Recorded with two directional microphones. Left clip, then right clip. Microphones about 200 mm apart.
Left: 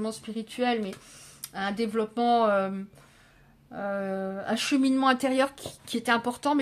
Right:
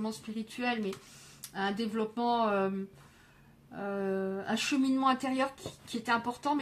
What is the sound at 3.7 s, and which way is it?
A woman's voice, 40° left (ahead or behind).